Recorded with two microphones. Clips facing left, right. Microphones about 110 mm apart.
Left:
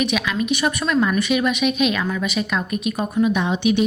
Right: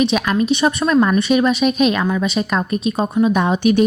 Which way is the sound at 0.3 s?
35° right (ahead or behind).